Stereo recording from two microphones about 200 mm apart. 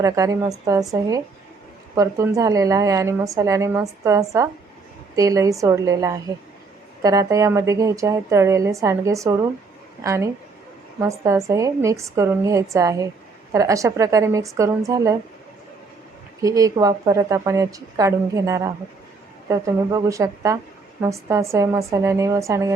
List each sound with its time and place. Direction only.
0.0 s a woman's voice: 15° right (ahead or behind)
16.4 s a woman's voice: 15° right (ahead or behind)